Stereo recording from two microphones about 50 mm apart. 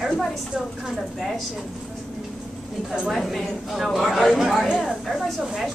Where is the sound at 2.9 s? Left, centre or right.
Centre.